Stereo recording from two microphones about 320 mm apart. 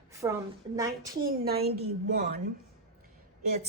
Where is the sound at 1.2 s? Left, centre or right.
Right.